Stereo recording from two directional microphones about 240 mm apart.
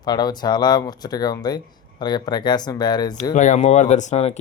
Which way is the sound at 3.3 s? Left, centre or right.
Left.